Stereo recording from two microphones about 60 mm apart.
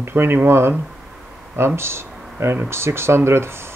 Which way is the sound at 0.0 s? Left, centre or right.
Right.